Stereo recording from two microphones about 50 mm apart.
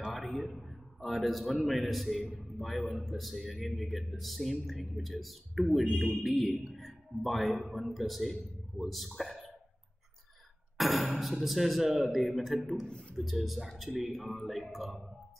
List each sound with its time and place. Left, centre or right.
0.1 s a sound: centre
1.7 s a man's voice: centre
10.8 s a man's voice: centre
12.8 s a man's voice: left
13.1 s a man's voice: centre